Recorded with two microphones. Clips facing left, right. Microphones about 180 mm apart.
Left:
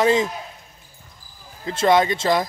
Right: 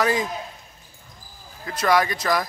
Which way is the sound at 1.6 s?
25° left (ahead or behind).